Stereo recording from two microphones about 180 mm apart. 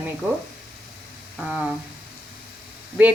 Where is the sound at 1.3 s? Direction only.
5° right (ahead or behind).